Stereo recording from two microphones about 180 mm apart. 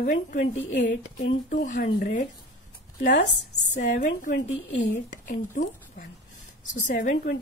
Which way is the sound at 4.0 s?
45° left (ahead or behind).